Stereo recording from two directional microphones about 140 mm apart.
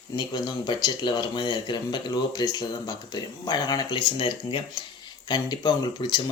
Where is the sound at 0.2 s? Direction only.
35° left (ahead or behind).